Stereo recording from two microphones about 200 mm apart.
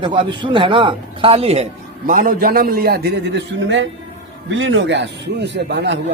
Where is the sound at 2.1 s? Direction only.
40° right (ahead or behind).